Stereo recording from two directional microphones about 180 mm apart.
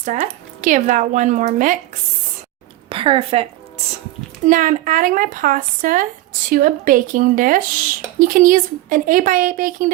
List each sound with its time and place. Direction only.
0.0 s a woman's voice: 45° right (ahead or behind)
2.9 s a woman's voice: 30° right (ahead or behind)
4.4 s a woman's voice: 45° right (ahead or behind)